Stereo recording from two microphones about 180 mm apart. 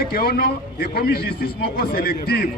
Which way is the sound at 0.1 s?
55° left (ahead or behind).